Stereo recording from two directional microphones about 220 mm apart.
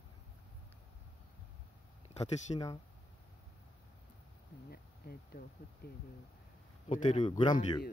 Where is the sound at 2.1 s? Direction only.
55° left (ahead or behind).